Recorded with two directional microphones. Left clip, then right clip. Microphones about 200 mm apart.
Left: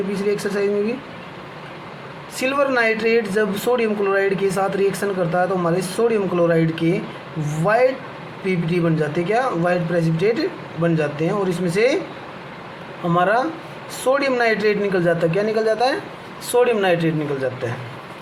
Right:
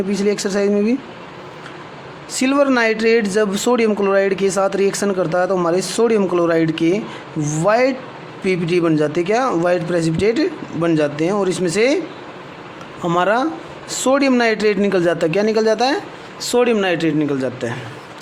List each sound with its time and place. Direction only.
0.1 s a man's voice: 55° right (ahead or behind)
2.3 s a man's voice: 55° right (ahead or behind)
13.1 s a man's voice: 55° right (ahead or behind)